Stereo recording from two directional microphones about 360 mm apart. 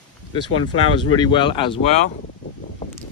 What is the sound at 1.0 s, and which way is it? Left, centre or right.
Speech, centre.